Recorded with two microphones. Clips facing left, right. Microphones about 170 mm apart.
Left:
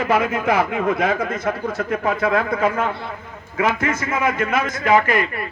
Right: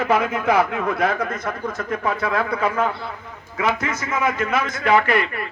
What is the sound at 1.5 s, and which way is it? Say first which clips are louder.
Speech: left 2 dB; 30° left (ahead or behind).